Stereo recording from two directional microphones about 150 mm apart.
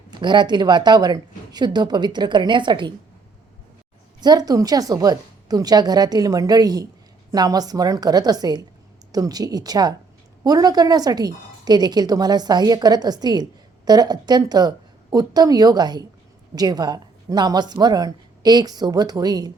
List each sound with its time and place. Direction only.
0.1 s a woman's voice: 30° right (ahead or behind)
4.2 s a woman's voice: 25° right (ahead or behind)